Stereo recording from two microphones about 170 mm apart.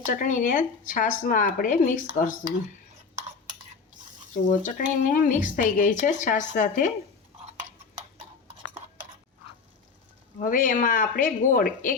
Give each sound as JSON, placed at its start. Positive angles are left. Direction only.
{"t": 0.0, "sound": "speech", "side_deg": 50}
{"t": 4.4, "sound": "speech", "side_deg": 50}
{"t": 10.4, "sound": "speech", "side_deg": 55}